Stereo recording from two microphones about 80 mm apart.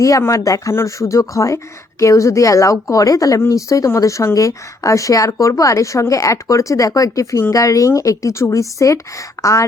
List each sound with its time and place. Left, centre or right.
0.2 s a woman's voice: left